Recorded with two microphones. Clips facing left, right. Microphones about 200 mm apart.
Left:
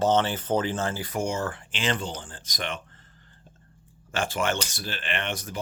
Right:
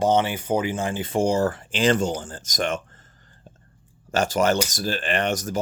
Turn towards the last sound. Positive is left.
turn(degrees=-40)  # may be behind; listen again after turning